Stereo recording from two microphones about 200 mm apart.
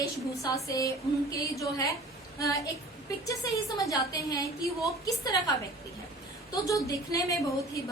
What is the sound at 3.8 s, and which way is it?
A woman's voice, 15° left (ahead or behind).